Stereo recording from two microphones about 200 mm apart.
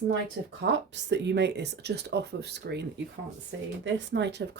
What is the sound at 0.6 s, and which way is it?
Speech, 60° right (ahead or behind).